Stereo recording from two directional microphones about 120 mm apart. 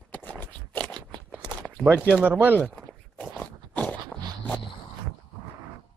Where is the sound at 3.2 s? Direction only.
15° left (ahead or behind).